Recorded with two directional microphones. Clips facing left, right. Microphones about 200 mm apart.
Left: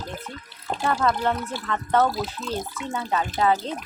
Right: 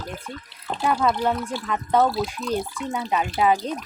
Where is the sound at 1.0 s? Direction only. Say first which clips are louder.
Right 1 dB; 10° right (ahead or behind).